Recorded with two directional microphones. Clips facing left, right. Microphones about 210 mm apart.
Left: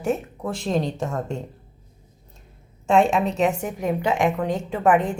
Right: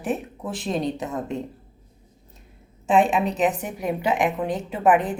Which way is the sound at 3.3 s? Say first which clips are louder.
Left 1 dB; 20° right (ahead or behind).